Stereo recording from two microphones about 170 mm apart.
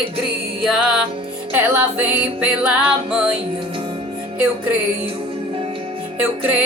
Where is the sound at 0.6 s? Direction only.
5° right (ahead or behind).